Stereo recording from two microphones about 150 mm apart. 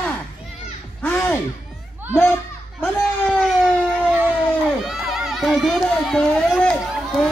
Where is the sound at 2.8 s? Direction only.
Centre (ahead or behind).